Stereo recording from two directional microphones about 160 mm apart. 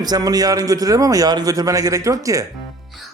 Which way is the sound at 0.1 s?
25° right (ahead or behind).